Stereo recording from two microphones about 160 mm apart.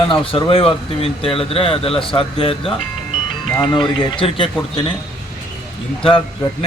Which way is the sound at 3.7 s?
30° left (ahead or behind).